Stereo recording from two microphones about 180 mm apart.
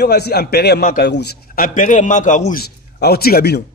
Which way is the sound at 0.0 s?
65° left (ahead or behind).